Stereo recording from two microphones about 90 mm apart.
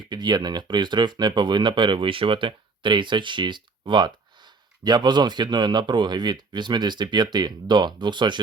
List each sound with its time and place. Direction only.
0.1 s speech: 55° right (ahead or behind)